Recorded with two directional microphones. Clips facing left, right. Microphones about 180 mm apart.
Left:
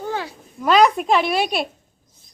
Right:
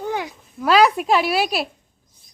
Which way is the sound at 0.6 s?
5° right (ahead or behind).